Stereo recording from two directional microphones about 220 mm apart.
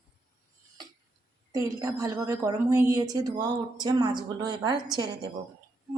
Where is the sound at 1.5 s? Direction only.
15° right (ahead or behind).